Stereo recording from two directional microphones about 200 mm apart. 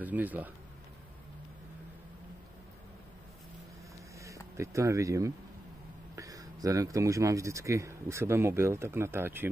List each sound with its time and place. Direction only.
0.0 s speech: 10° right (ahead or behind)
4.2 s speech: 15° right (ahead or behind)